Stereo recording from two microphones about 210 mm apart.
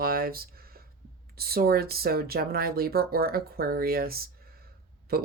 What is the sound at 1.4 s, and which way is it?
Speech, 45° right (ahead or behind).